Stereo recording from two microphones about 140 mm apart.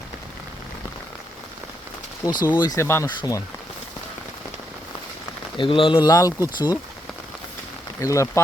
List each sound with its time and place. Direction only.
2.2 s speech: 25° left (ahead or behind)
5.5 s speech: 40° left (ahead or behind)
8.0 s speech: 20° left (ahead or behind)